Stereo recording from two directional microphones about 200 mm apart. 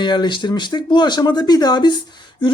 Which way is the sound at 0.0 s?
20° left (ahead or behind).